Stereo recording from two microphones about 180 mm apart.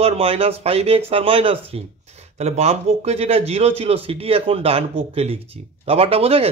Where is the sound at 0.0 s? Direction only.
35° right (ahead or behind).